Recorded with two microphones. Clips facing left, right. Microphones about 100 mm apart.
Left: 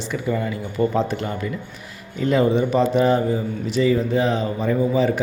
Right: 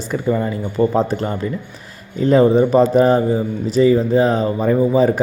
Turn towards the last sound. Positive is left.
turn(degrees=-40)  # may be behind; listen again after turning